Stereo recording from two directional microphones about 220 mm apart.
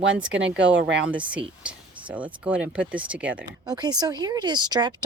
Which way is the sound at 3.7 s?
20° right (ahead or behind).